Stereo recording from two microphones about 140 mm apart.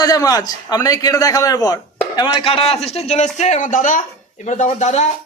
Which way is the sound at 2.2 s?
40° left (ahead or behind).